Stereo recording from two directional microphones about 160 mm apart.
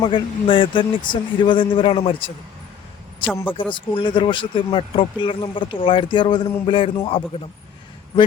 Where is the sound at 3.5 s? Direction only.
30° left (ahead or behind).